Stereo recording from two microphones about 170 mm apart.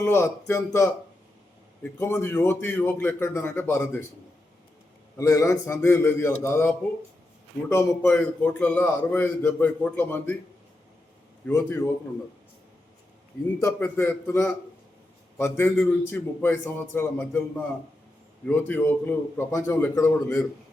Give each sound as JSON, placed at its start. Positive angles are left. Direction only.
{"t": 0.0, "sound": "a man's voice", "side_deg": 15}
{"t": 5.1, "sound": "a man's voice", "side_deg": 20}
{"t": 11.4, "sound": "a man's voice", "side_deg": 15}
{"t": 13.6, "sound": "a man's voice", "side_deg": 15}
{"t": 18.4, "sound": "a man's voice", "side_deg": 10}